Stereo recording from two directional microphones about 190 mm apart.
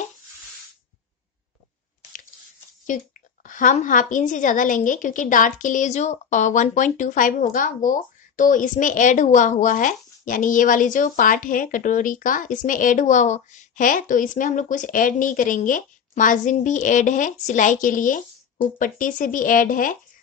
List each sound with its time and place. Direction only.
3.4 s a woman's voice: 45° left (ahead or behind)